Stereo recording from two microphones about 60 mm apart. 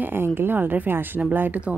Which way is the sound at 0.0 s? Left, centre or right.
Right.